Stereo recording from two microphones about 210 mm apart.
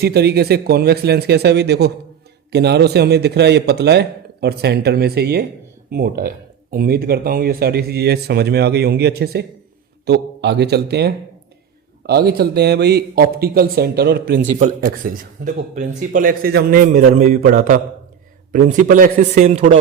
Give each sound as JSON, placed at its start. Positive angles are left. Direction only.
{"t": 0.0, "sound": "a man's voice", "side_deg": -50}